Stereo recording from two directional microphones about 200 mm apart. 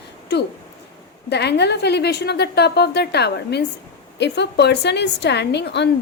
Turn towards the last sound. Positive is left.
turn(degrees=60)  # may be behind; listen again after turning